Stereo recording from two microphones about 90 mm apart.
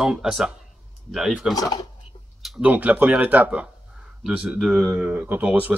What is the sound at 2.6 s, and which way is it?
Speech, 15° right (ahead or behind).